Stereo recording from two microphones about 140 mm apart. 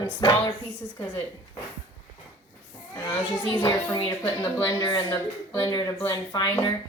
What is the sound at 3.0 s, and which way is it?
A child's voice, 25° left (ahead or behind).